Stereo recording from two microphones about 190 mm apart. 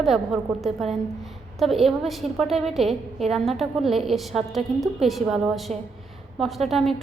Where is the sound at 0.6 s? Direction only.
Centre (ahead or behind).